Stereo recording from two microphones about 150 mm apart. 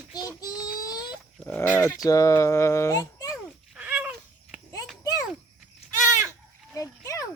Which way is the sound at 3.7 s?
10° right (ahead or behind).